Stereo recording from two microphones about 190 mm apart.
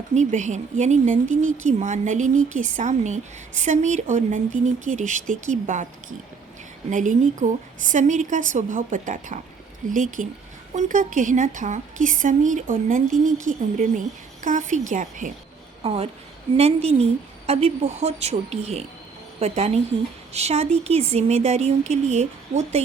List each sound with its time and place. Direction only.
0.1 s a woman's voice: 40° right (ahead or behind)
6.9 s a woman's voice: 40° right (ahead or behind)
15.8 s a woman's voice: 30° right (ahead or behind)